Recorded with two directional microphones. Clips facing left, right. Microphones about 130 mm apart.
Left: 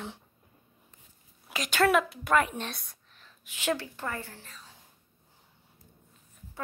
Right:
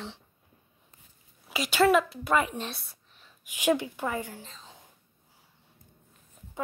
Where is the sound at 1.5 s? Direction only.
5° right (ahead or behind).